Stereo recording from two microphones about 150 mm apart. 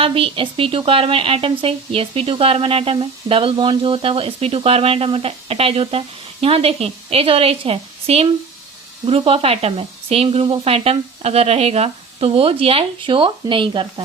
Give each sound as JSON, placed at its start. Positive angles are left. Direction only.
{"t": 0.0, "sound": "speech", "side_deg": -40}